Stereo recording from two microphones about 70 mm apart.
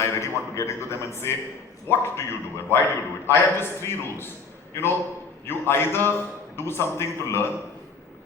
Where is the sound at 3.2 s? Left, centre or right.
Left.